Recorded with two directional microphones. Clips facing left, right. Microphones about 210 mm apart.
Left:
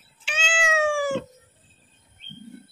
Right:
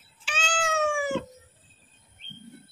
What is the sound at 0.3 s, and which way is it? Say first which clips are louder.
Cat: left 2 dB; 25° left (ahead or behind).